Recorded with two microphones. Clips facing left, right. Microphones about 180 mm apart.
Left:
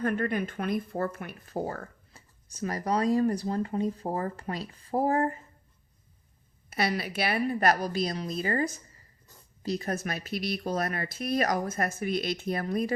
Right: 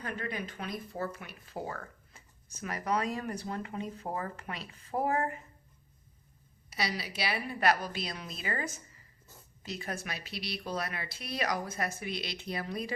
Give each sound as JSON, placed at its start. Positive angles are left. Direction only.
{"t": 0.0, "sound": "speech", "side_deg": 50}
{"t": 6.7, "sound": "speech", "side_deg": 55}